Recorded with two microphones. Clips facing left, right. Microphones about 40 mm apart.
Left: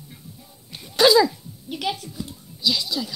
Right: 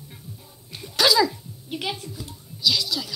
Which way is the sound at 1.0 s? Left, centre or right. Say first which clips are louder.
Left 4 dB; left.